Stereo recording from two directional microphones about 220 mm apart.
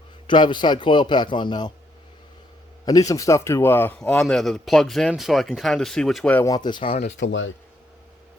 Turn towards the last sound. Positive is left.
turn(degrees=55)  # may be behind; listen again after turning